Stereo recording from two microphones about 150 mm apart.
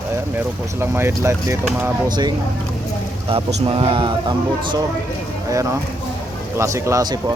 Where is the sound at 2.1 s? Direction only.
30° right (ahead or behind).